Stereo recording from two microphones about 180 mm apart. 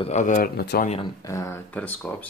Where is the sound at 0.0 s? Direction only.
40° left (ahead or behind); by 0.8 s 60° left (ahead or behind).